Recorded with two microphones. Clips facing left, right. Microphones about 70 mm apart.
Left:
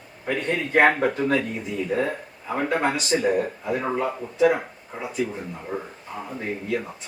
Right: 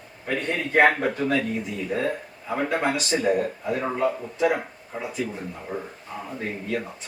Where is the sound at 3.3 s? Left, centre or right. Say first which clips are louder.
Even; centre.